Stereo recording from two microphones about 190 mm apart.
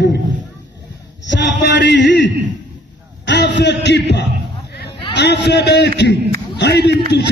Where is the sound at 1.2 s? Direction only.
65° left (ahead or behind).